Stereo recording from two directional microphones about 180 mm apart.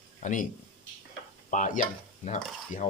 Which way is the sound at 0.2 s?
45° left (ahead or behind).